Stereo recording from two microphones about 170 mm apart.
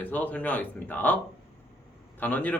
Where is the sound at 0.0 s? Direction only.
10° left (ahead or behind).